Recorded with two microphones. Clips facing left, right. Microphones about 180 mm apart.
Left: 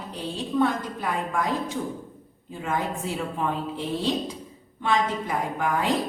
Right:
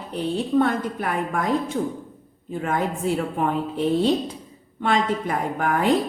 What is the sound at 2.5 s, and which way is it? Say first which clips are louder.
A woman's voice: right 4 dB; 55° right (ahead or behind).